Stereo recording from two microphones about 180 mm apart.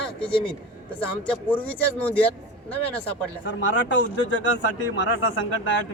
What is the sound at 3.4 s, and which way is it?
Speech, 90° left.